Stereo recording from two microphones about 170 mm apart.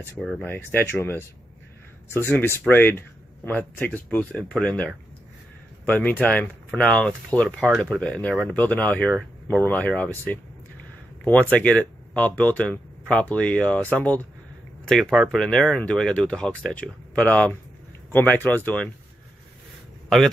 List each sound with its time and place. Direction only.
0.2 s speech: centre (ahead or behind)
0.5 s speech: 10° left (ahead or behind)